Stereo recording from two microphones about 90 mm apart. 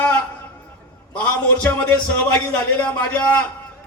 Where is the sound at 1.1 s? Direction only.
15° left (ahead or behind).